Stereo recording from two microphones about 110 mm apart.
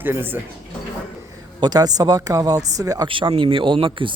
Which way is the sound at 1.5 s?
40° right (ahead or behind).